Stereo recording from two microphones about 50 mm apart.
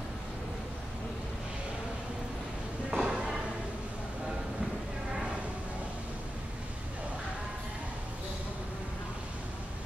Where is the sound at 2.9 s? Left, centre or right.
Right.